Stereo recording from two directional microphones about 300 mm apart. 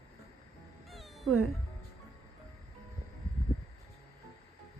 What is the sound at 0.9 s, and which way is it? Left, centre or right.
Cat, centre.